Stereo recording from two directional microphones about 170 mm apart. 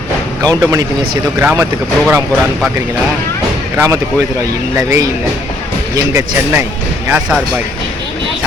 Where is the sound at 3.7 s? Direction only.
15° right (ahead or behind).